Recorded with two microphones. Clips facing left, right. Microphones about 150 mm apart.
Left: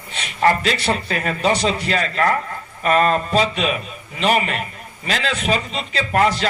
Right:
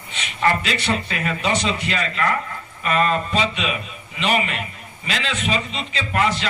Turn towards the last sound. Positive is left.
turn(degrees=40)  # may be behind; listen again after turning